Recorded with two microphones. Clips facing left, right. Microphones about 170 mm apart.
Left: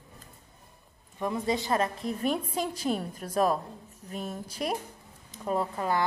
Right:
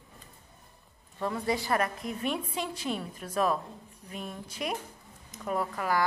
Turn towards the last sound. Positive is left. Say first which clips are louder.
# left 1 dB
turn(degrees=25)  # may be behind; listen again after turning